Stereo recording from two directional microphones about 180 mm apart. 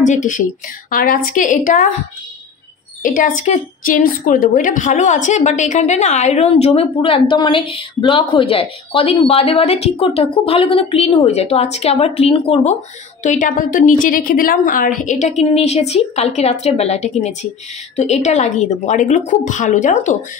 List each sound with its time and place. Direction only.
0.0 s a woman's voice: 40° left (ahead or behind)
3.0 s a woman's voice: 50° left (ahead or behind); by 12.7 s 35° left (ahead or behind)
13.2 s a woman's voice: 45° left (ahead or behind)